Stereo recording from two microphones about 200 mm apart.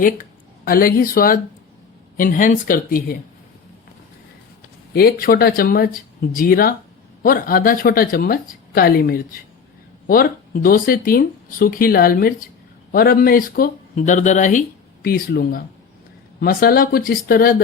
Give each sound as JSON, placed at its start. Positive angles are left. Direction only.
{"t": 0.6, "sound": "speech", "side_deg": 45}
{"t": 5.2, "sound": "speech", "side_deg": 50}
{"t": 15.0, "sound": "speech", "side_deg": 50}